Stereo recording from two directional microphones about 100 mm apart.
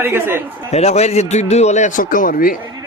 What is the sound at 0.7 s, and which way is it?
Speech, 90° left.